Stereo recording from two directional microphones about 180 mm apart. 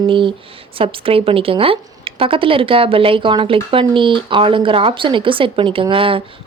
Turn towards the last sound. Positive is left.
turn(degrees=-30)  # may be behind; listen again after turning